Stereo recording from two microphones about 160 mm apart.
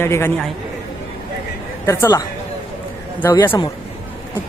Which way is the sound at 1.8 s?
15° left (ahead or behind).